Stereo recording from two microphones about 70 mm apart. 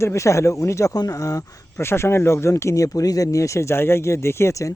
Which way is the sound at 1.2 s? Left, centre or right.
Left.